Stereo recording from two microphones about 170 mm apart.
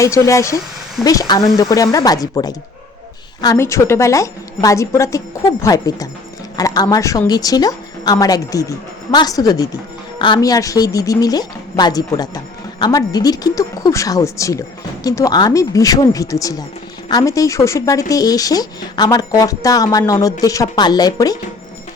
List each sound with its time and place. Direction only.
0.0 s a woman's voice: 20° left (ahead or behind)